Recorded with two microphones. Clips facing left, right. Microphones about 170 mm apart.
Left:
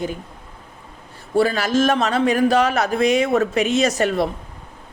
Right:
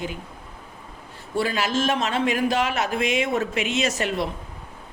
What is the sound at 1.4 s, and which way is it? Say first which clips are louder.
Speech: left 5 dB; 40° left (ahead or behind).